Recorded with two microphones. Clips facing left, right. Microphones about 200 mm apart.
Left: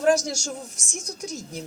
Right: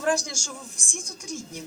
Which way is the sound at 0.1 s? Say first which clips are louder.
Left 5 dB; 40° left (ahead or behind).